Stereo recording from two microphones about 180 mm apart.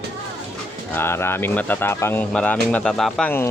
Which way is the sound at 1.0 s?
15° left (ahead or behind).